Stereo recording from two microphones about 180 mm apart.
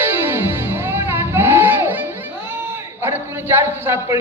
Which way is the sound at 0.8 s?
10° right (ahead or behind).